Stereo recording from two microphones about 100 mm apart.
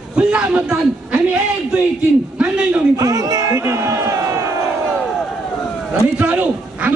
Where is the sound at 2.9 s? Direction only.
35° right (ahead or behind).